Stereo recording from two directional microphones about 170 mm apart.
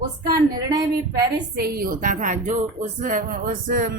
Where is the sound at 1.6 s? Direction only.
60° right (ahead or behind).